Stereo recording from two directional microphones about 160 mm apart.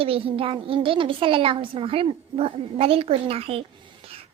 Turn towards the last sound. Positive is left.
turn(degrees=-35)  # may be behind; listen again after turning